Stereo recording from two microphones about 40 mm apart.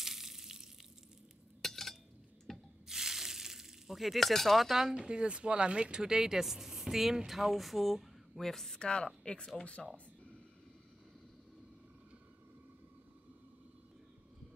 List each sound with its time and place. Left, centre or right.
0.0 s a sound: centre
1.6 s cutlery: centre
2.5 s rub: centre
2.9 s a sound: centre
4.9 s speech: right; by 8.7 s centre
8.7 s a woman's voice: left